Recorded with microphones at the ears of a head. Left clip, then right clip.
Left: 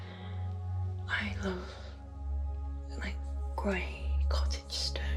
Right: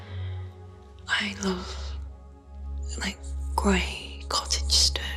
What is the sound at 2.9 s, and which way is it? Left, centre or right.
Music, right.